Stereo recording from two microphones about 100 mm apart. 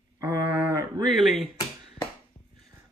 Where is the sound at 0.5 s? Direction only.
15° right (ahead or behind).